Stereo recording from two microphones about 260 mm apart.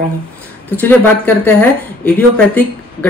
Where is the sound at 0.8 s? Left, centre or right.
Centre.